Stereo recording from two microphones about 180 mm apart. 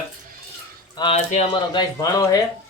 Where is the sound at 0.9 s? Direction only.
30° left (ahead or behind).